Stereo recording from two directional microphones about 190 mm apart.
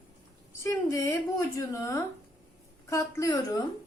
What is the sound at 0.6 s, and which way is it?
A woman's voice, 15° left (ahead or behind).